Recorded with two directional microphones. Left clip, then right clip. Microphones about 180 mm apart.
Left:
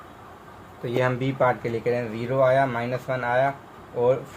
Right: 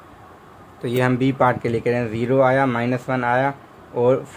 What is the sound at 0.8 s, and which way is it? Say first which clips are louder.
Speech: right 4 dB; 45° right (ahead or behind).